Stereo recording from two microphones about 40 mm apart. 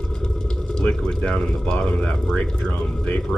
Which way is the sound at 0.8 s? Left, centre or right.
Left.